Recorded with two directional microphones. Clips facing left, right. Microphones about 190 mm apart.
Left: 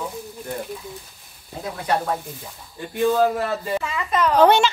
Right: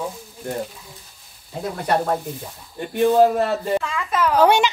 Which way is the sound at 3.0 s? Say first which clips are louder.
Right 4 dB; 20° right (ahead or behind).